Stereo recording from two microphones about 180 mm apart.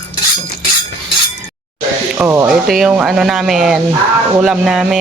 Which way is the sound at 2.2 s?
15° right (ahead or behind).